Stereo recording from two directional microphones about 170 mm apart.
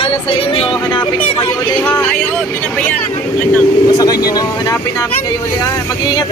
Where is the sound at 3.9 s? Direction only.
20° left (ahead or behind).